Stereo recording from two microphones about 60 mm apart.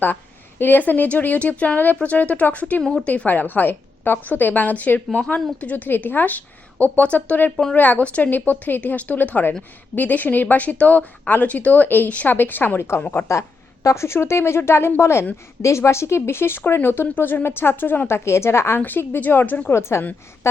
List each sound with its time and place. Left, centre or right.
0.6 s a woman's voice: left
3.2 s a woman's voice: left
7.5 s speech: centre
7.8 s a woman's voice: left
13.8 s speech: left
18.3 s speech: left
18.8 s speech: left
19.7 s speech: left